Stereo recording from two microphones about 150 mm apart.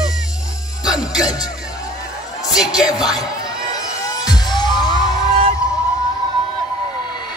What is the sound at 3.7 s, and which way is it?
Music, 25° left (ahead or behind).